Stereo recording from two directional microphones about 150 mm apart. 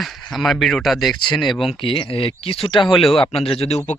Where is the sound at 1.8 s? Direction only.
35° left (ahead or behind).